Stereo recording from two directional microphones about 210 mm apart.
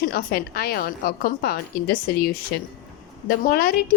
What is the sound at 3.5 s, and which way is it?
Speech, 45° left (ahead or behind).